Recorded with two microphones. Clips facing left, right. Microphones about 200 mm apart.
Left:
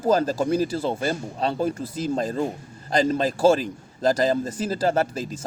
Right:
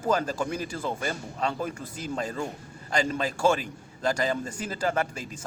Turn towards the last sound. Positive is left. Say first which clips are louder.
# left 6 dB
turn(degrees=35)  # may be behind; listen again after turning